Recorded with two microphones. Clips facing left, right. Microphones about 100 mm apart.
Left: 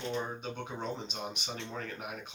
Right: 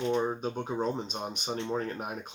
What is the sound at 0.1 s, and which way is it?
Speech, 35° right (ahead or behind).